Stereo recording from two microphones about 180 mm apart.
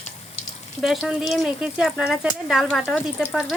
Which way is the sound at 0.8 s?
Centre (ahead or behind).